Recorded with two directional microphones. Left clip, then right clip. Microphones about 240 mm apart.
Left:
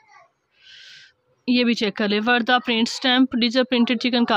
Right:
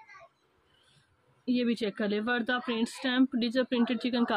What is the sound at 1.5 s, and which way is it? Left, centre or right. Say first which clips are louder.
Speech: left 10 dB; left.